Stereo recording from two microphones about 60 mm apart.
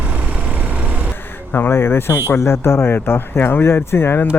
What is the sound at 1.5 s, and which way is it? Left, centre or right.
Speech, left.